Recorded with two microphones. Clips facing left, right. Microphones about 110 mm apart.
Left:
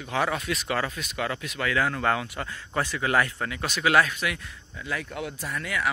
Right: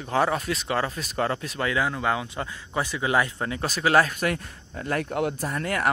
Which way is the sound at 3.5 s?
35° right (ahead or behind).